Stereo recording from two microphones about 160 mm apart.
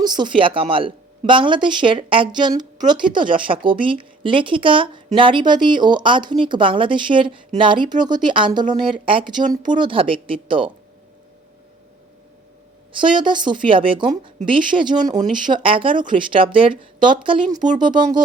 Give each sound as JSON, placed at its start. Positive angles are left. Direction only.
{"t": 0.0, "sound": "speech", "side_deg": -25}
{"t": 13.0, "sound": "a woman's voice", "side_deg": -30}